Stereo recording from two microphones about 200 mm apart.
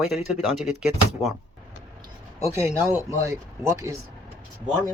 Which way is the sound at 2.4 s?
15° right (ahead or behind).